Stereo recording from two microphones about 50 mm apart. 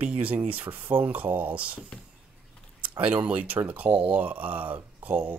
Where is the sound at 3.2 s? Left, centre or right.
Right.